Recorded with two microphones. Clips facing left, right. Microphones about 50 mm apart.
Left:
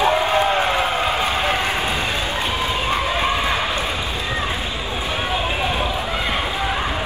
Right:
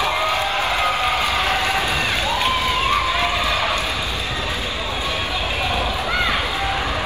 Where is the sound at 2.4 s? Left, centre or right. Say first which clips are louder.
Right 2 dB; right.